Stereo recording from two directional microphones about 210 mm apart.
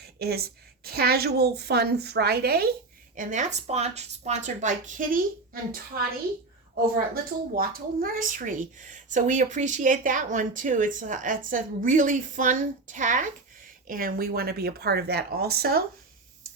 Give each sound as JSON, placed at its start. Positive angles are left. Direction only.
{"t": 0.0, "sound": "a woman's voice", "side_deg": -50}
{"t": 3.2, "sound": "speech", "side_deg": -35}
{"t": 6.9, "sound": "a woman's voice", "side_deg": -45}